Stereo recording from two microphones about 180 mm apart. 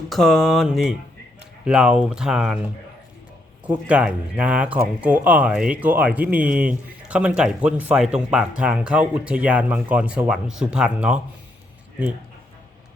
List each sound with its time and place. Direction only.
0.1 s speech: centre (ahead or behind)
3.7 s speech: 5° right (ahead or behind)